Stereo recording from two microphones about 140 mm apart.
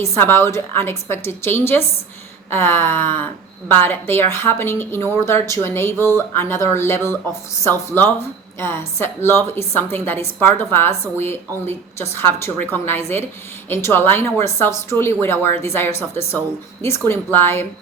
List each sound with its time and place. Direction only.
0.0 s a woman's voice: 15° left (ahead or behind)